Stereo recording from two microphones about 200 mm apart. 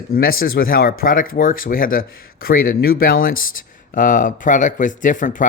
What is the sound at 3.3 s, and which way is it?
Speech, 90° left.